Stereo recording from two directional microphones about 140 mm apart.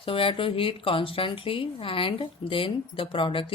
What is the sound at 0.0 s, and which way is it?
A woman's voice, 40° left (ahead or behind).